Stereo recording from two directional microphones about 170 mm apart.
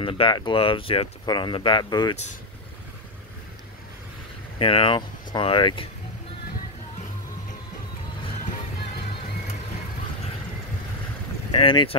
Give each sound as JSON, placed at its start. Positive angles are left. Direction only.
{"t": 0.0, "sound": "speech", "side_deg": 30}
{"t": 4.6, "sound": "speech", "side_deg": 30}
{"t": 11.6, "sound": "speech", "side_deg": 30}